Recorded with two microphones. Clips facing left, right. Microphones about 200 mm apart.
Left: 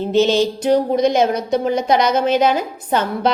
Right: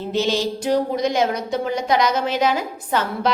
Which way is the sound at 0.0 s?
20° left (ahead or behind).